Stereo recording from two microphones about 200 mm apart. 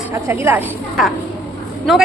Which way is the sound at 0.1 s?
10° right (ahead or behind).